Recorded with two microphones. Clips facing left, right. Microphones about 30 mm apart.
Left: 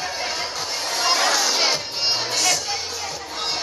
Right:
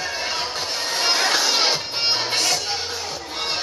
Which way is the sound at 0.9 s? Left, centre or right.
Right.